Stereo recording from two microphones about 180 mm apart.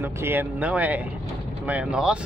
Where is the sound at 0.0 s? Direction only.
10° right (ahead or behind).